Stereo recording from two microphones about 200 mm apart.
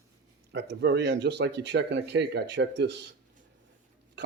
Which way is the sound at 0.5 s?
60° right (ahead or behind).